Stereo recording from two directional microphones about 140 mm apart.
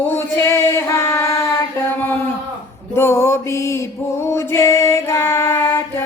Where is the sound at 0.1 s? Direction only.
20° left (ahead or behind).